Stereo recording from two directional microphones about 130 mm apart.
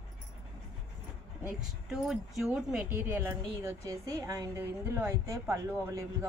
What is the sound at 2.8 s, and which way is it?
Speech, 15° right (ahead or behind).